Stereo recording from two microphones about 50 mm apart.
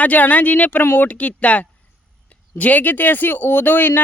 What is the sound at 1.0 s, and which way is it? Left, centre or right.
Speech, left.